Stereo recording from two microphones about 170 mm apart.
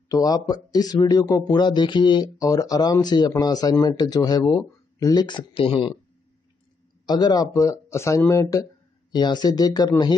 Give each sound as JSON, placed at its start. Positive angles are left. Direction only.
{"t": 0.1, "sound": "speech", "side_deg": 20}
{"t": 7.1, "sound": "speech", "side_deg": 25}